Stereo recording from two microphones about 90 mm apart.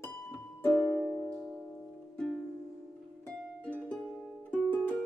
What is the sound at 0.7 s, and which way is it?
Music, 5° right (ahead or behind).